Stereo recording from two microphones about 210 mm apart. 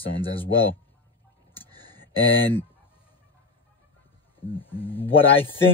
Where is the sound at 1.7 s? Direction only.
20° right (ahead or behind).